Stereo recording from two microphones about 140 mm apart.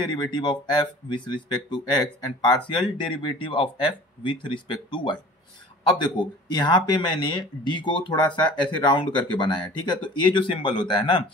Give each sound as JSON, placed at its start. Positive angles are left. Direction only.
{"t": 0.0, "sound": "speech", "side_deg": 35}